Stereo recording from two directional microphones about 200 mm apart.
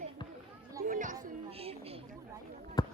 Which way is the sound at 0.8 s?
40° right (ahead or behind).